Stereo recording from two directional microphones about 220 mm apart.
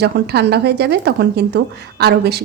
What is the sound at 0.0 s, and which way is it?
A woman's voice, 50° right (ahead or behind).